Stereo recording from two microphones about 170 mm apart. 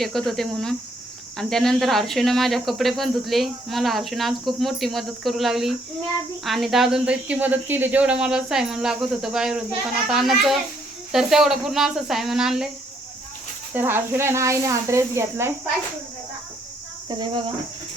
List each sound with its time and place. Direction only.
0.0 s speech: centre (ahead or behind)
13.7 s a woman's voice: 15° right (ahead or behind)
17.1 s cricket: 25° right (ahead or behind)